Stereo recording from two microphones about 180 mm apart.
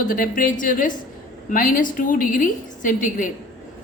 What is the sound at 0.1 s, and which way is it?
A woman's voice, 50° left (ahead or behind).